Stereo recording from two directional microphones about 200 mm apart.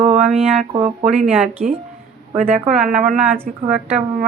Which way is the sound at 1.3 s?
5° right (ahead or behind).